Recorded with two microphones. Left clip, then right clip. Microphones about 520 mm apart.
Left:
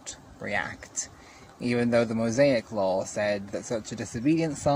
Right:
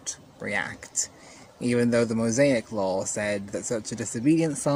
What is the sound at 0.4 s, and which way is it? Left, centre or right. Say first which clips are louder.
Speech: right 1 dB; left.